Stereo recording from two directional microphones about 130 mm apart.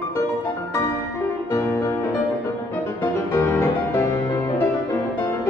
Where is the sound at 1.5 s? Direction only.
20° left (ahead or behind).